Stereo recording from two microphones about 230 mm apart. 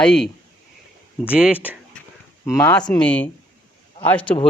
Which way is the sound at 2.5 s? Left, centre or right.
Centre.